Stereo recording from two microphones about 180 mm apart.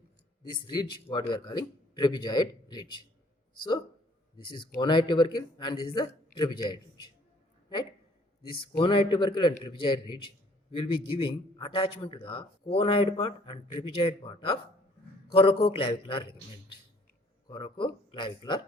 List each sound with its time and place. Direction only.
0.4 s a man's voice: 25° left (ahead or behind)
4.4 s a man's voice: 25° left (ahead or behind)
8.8 s a man's voice: 30° left (ahead or behind)
17.5 s a man's voice: 25° left (ahead or behind)